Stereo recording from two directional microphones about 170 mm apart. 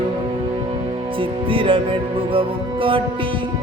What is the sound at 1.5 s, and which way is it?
Music, 30° right (ahead or behind).